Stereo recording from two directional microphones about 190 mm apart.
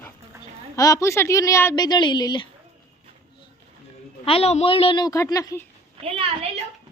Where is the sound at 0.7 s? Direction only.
20° left (ahead or behind).